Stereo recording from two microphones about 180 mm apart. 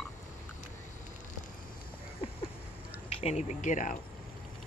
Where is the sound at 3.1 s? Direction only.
35° left (ahead or behind).